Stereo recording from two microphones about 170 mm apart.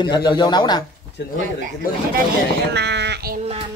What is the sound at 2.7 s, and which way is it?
Speech, 85° right.